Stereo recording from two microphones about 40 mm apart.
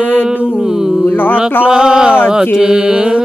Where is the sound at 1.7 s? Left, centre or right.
Centre.